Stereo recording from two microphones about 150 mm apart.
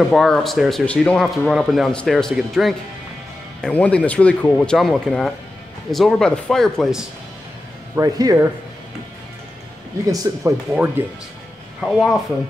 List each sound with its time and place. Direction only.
0.1 s speech: centre (ahead or behind)
7.9 s speech: 25° right (ahead or behind)
10.3 s speech: 25° right (ahead or behind)
10.7 s speech: 10° right (ahead or behind)
11.8 s speech: centre (ahead or behind)